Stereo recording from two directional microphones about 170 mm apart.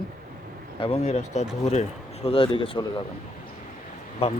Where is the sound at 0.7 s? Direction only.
35° left (ahead or behind).